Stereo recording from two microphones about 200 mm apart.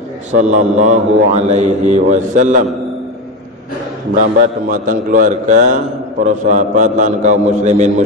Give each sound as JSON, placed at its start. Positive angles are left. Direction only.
{"t": 0.3, "sound": "a man's voice", "side_deg": -35}
{"t": 4.2, "sound": "a man's voice", "side_deg": -40}